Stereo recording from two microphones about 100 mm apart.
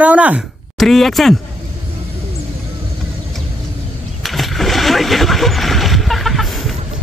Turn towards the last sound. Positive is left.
turn(degrees=0)  # may be behind; listen again after turning